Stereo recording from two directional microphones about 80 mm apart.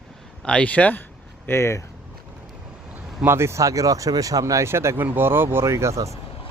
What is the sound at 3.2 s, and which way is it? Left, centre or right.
Speech, right.